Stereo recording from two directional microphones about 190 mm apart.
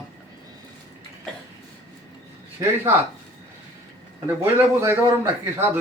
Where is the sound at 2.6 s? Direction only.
10° right (ahead or behind).